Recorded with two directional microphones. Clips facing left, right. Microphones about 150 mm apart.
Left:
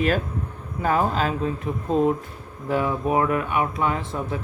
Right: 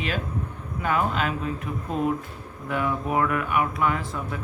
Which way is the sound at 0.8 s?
35° left (ahead or behind).